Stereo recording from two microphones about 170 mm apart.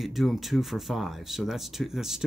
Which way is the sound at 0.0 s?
Centre (ahead or behind).